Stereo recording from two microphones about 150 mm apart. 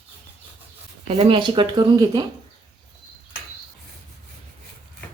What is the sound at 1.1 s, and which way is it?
Speech, 45° right (ahead or behind).